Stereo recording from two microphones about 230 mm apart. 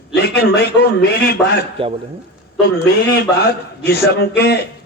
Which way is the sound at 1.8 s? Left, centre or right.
Right.